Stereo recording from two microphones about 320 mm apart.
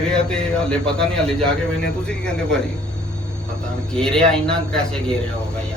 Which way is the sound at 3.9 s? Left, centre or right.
Centre.